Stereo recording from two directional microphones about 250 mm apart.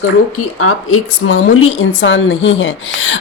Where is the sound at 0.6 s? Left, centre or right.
Left.